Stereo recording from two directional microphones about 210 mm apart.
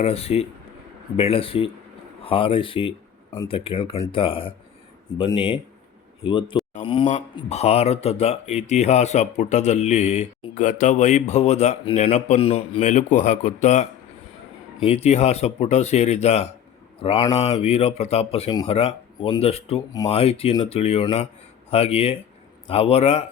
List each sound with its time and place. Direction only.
0.0 s speech: 30° left (ahead or behind)
6.7 s a sound: 25° left (ahead or behind)
7.3 s speech: 30° left (ahead or behind)
14.8 s speech: 30° left (ahead or behind)